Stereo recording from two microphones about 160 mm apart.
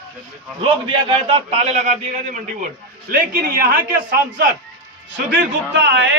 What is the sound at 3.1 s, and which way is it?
A man's voice, 65° right (ahead or behind).